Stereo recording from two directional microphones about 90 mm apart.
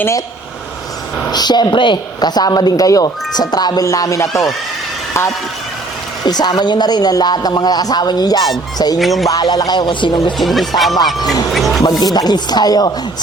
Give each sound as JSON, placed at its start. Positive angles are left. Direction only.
{"t": 1.3, "sound": "speech", "side_deg": 50}
{"t": 6.2, "sound": "speech", "side_deg": 50}
{"t": 9.0, "sound": "speech", "side_deg": 0}
{"t": 9.3, "sound": "speech", "side_deg": 45}
{"t": 10.3, "sound": "speech", "side_deg": 0}
{"t": 11.2, "sound": "speech", "side_deg": 45}
{"t": 11.5, "sound": "music", "side_deg": 0}
{"t": 11.8, "sound": "speech", "side_deg": 45}